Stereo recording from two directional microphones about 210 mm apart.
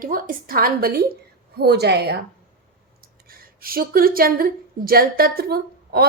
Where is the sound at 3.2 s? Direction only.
45° right (ahead or behind).